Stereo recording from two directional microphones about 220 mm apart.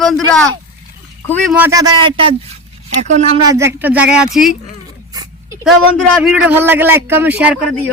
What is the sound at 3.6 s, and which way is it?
Speech, 10° right (ahead or behind).